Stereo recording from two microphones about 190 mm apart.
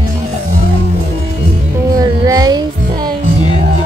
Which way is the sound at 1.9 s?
20° right (ahead or behind).